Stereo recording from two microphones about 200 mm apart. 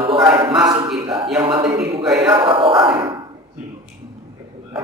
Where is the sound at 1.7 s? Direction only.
Centre (ahead or behind).